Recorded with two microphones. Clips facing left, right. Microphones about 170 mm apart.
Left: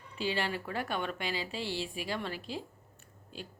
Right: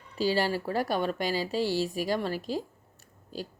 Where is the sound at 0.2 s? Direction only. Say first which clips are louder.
Right 7 dB; 40° right (ahead or behind).